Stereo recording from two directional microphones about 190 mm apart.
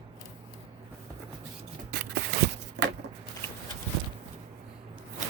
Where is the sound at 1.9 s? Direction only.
60° right (ahead or behind).